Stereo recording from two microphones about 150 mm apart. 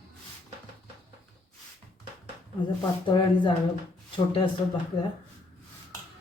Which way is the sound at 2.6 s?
30° left (ahead or behind).